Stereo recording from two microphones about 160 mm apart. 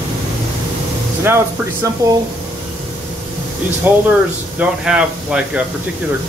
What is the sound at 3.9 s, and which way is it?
Speech, 10° right (ahead or behind).